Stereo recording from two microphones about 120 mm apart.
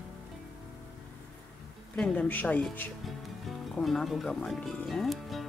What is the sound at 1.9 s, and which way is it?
Speech, 10° left (ahead or behind).